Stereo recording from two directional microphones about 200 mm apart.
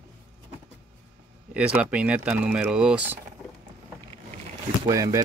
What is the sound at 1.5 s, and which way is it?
Speech, 5° right (ahead or behind).